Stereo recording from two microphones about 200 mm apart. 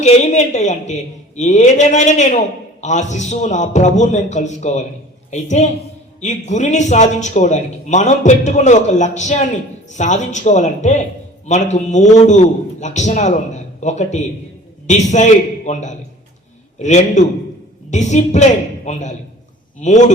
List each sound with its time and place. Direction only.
0.0 s a man's voice: 35° left (ahead or behind)